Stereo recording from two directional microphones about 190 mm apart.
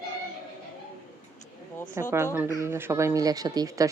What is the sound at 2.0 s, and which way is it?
Speech, 15° right (ahead or behind).